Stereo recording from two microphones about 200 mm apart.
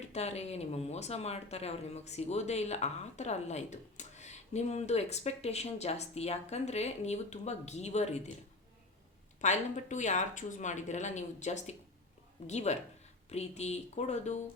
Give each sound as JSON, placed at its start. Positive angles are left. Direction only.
{"t": 0.1, "sound": "speech", "side_deg": 30}
{"t": 9.4, "sound": "speech", "side_deg": 35}